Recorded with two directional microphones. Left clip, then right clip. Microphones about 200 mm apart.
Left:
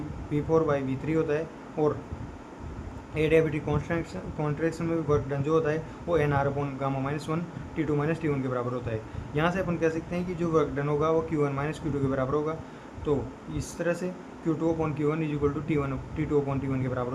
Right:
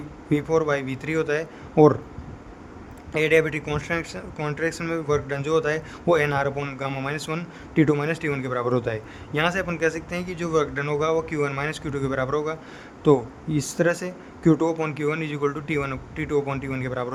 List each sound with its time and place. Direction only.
0.3 s speech: 55° right (ahead or behind)
3.2 s speech: 55° right (ahead or behind)